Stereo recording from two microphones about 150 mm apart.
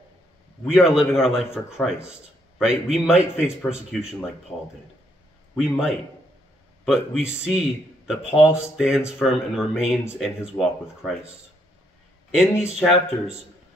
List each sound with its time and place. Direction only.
0.7 s speech: 5° right (ahead or behind)
2.6 s speech: 5° right (ahead or behind)
5.6 s speech: centre (ahead or behind)
12.3 s speech: 5° right (ahead or behind)